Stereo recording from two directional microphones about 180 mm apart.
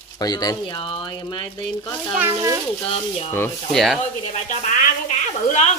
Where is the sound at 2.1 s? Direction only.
15° right (ahead or behind).